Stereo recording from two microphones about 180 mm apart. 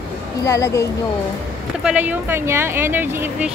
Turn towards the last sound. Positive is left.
turn(degrees=-10)  # may be behind; listen again after turning